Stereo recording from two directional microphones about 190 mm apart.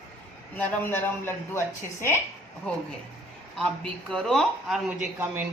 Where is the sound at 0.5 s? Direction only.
10° left (ahead or behind).